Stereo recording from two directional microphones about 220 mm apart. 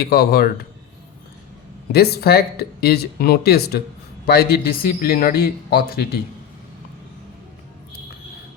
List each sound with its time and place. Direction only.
0.0 s a man's voice: 45° left (ahead or behind)
1.9 s a man's voice: 45° left (ahead or behind)